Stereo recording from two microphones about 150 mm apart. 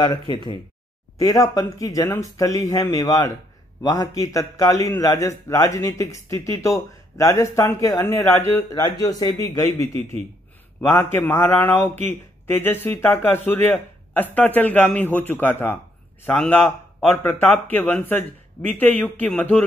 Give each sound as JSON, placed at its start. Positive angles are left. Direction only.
{"t": 0.0, "sound": "speech", "side_deg": 30}
{"t": 10.8, "sound": "a man's voice", "side_deg": 15}